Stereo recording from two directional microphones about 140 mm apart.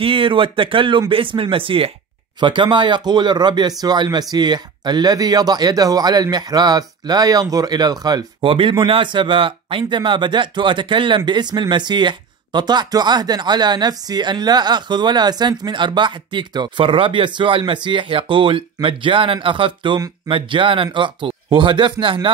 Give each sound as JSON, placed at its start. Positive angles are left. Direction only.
{"t": 0.0, "sound": "speech", "side_deg": -40}